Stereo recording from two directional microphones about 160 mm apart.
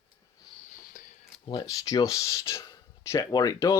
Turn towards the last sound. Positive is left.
turn(degrees=20)  # may be behind; listen again after turning